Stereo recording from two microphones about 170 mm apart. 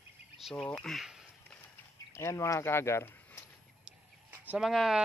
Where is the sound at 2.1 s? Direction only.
15° left (ahead or behind).